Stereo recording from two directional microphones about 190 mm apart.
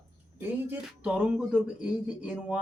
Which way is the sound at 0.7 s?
5° right (ahead or behind).